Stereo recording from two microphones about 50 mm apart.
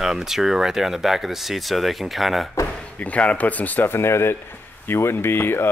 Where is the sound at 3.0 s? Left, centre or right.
Left.